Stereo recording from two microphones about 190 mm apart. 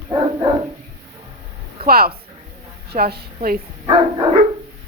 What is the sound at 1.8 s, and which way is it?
A woman's voice, 55° right (ahead or behind).